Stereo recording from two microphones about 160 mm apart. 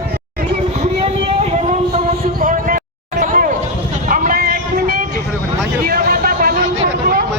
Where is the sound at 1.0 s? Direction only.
40° right (ahead or behind).